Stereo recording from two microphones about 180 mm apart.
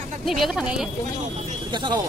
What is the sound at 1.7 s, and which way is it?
Speech, 25° right (ahead or behind).